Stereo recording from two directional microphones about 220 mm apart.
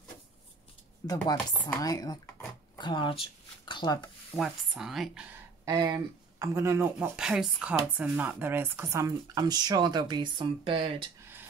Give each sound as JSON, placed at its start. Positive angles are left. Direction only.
{"t": 1.0, "sound": "speech", "side_deg": 15}
{"t": 4.4, "sound": "speech", "side_deg": 0}